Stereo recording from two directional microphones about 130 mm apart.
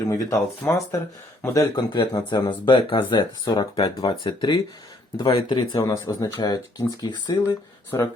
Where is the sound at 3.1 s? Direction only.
30° left (ahead or behind).